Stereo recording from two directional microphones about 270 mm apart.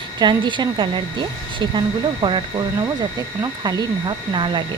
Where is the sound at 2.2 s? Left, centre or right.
Centre.